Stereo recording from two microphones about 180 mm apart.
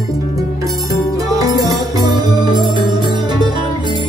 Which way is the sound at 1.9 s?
20° right (ahead or behind).